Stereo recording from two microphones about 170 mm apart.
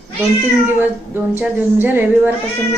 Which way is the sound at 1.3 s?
10° right (ahead or behind).